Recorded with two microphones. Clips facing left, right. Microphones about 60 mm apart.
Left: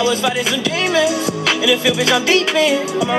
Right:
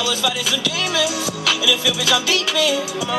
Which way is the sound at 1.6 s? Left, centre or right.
Left.